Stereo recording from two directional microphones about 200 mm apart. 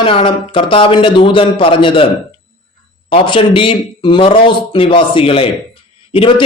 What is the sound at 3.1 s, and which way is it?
Speech, 25° left (ahead or behind).